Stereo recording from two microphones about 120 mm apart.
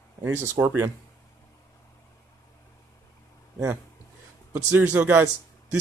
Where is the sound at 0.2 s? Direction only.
20° right (ahead or behind).